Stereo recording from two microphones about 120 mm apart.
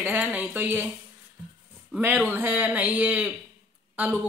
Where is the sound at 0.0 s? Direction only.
15° right (ahead or behind).